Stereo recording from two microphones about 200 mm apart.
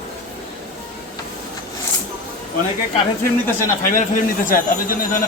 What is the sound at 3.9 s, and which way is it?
Speech, 40° left (ahead or behind).